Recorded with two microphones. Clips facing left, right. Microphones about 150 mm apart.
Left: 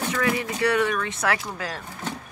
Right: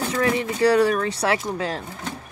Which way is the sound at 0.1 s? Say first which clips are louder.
Right 3 dB; 30° right (ahead or behind).